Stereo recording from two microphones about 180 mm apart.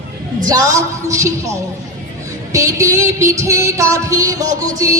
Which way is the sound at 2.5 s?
15° right (ahead or behind).